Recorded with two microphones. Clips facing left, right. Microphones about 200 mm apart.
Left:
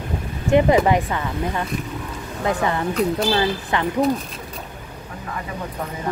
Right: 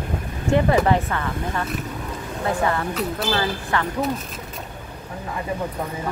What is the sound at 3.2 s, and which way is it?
Speech, 20° left (ahead or behind).